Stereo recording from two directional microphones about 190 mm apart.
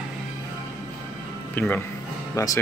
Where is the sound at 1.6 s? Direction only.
10° left (ahead or behind).